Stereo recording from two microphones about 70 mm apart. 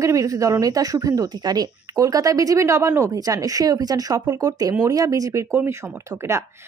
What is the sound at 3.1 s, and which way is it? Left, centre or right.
Speech, right.